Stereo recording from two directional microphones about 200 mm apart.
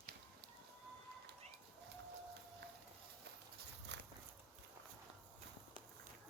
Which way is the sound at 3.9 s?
60° right (ahead or behind).